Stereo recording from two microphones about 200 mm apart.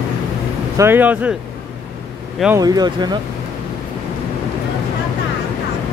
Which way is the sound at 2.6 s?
20° right (ahead or behind).